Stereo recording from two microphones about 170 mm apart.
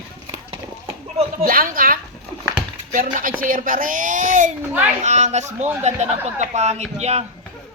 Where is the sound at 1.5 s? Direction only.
55° right (ahead or behind); by 7.3 s 40° right (ahead or behind).